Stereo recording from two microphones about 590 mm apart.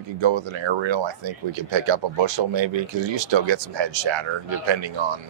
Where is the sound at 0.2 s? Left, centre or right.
Right.